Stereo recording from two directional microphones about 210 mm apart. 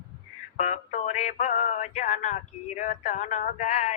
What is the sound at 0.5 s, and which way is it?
Male singing, 35° left (ahead or behind).